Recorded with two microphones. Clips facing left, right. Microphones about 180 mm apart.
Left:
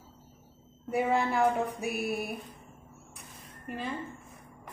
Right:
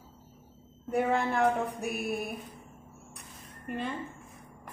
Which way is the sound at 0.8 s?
5° left (ahead or behind).